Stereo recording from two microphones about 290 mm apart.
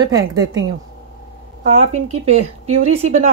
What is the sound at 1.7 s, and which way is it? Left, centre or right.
Speech, right.